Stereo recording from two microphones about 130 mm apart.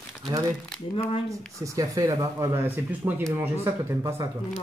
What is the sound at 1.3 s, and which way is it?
Speech, 25° right (ahead or behind).